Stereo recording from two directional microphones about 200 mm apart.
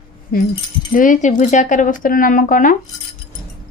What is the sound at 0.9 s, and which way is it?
Speech, 40° left (ahead or behind).